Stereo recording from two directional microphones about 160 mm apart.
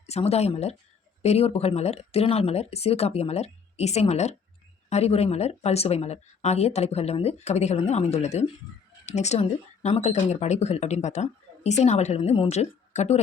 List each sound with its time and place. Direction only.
0.1 s speech: 40° left (ahead or behind)